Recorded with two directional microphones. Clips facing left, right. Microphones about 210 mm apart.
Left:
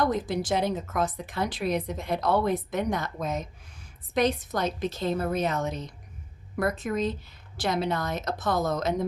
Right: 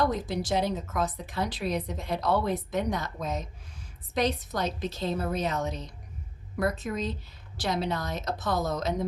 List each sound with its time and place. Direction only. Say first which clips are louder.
0.1 s a woman's voice: left 2 dB; 50° left (ahead or behind)